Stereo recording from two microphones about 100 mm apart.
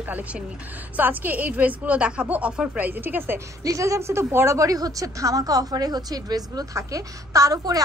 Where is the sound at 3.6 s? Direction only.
30° right (ahead or behind).